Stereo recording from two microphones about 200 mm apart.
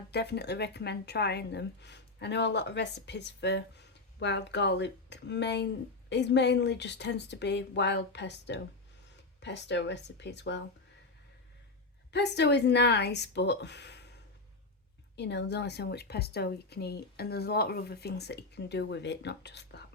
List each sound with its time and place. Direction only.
0.1 s speech: 55° left (ahead or behind)
12.1 s speech: 60° left (ahead or behind)
15.1 s speech: 60° left (ahead or behind)